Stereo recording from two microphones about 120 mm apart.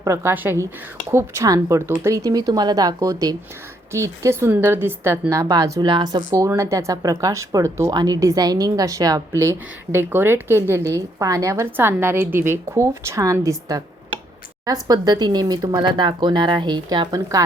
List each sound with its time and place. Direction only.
0.0 s speech: 25° right (ahead or behind)